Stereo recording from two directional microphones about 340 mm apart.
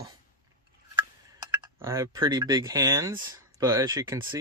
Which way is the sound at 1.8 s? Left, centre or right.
Centre.